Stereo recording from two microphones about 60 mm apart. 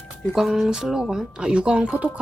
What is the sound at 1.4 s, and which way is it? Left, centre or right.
Speech, centre.